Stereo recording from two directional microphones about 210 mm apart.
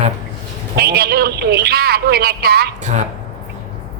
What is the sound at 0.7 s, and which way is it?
A man's voice, 50° right (ahead or behind).